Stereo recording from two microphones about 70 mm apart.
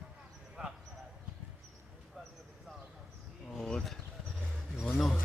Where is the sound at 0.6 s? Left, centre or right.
Centre.